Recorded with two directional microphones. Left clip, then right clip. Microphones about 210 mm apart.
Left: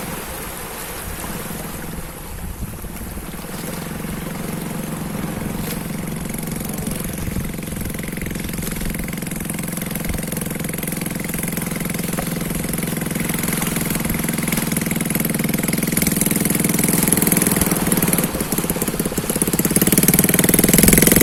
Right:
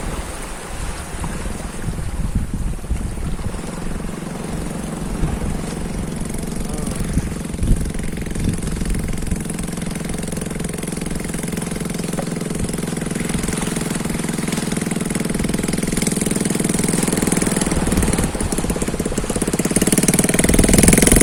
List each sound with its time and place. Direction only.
10.6 s vehicle: 30° left (ahead or behind)
12.7 s engine: 30° left (ahead or behind)